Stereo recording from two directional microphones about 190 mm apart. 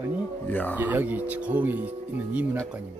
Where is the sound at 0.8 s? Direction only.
10° right (ahead or behind).